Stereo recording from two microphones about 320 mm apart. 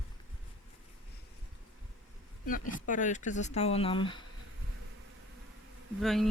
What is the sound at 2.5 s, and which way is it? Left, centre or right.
Speech, left.